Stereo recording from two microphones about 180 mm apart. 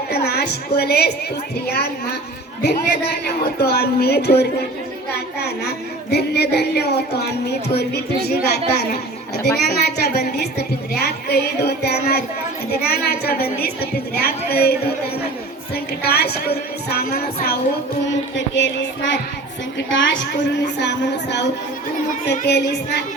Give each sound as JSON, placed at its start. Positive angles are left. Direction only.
{"t": 0.1, "sound": "a woman's voice", "side_deg": 60}
{"t": 18.3, "sound": "child singing", "side_deg": 90}
{"t": 19.9, "sound": "a woman's voice", "side_deg": 85}